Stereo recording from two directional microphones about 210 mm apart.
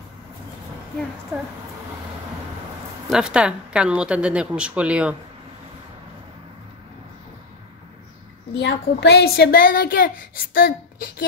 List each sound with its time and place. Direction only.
3.1 s speech: 5° right (ahead or behind)
8.5 s a woman's voice: 55° left (ahead or behind)